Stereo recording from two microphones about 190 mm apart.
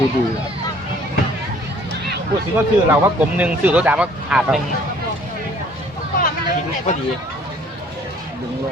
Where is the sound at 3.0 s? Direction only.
10° right (ahead or behind).